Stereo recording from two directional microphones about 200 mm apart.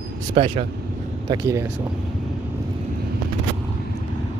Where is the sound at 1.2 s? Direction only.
15° right (ahead or behind).